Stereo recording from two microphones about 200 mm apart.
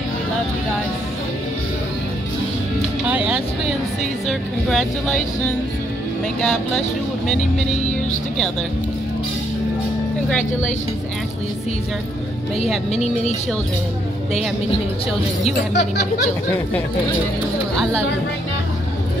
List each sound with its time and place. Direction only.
3.1 s speech: 5° right (ahead or behind)
12.9 s speech: 35° left (ahead or behind)